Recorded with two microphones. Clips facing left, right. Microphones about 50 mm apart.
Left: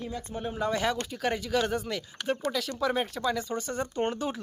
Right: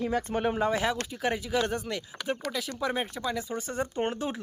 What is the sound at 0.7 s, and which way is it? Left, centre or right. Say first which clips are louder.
Speech: even; centre.